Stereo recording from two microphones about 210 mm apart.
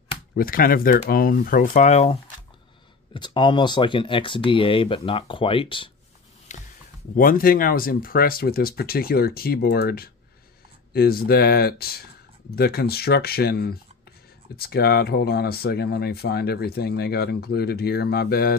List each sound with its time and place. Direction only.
0.4 s speech: 45° left (ahead or behind); by 5.9 s 25° left (ahead or behind)
6.5 s a sound: 35° left (ahead or behind)
7.2 s speech: 40° left (ahead or behind)